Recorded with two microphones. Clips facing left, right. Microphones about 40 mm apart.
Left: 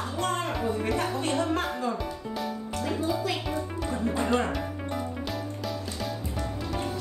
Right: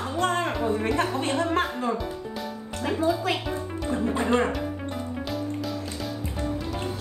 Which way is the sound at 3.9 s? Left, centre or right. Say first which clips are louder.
Right 4 dB; centre.